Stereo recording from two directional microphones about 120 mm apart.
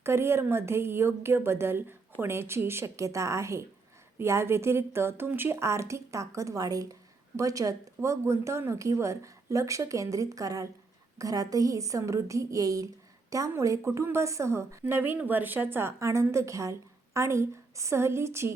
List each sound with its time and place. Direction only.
0.0 s a woman's voice: 20° right (ahead or behind)